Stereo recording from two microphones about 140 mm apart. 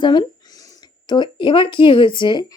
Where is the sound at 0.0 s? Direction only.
35° left (ahead or behind).